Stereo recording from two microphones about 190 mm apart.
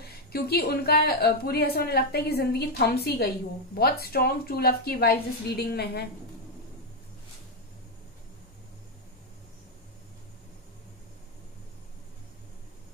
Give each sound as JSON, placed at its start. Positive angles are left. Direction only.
{"t": 0.0, "sound": "speech", "side_deg": 55}